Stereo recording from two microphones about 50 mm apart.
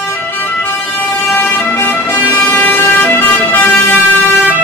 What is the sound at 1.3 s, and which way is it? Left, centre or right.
Vehicle, left.